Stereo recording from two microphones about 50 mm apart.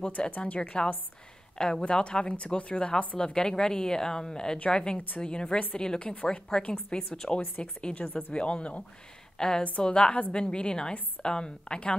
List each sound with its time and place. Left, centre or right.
0.4 s speech: centre
3.3 s a woman's voice: centre